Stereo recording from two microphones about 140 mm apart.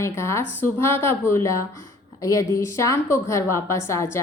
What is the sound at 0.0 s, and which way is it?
Speech, 20° left (ahead or behind).